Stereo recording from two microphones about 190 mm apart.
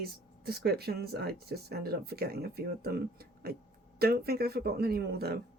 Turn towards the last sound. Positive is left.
turn(degrees=-55)  # may be behind; listen again after turning